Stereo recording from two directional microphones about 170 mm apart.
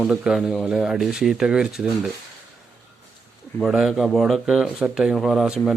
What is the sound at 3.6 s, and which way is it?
Speech, centre (ahead or behind).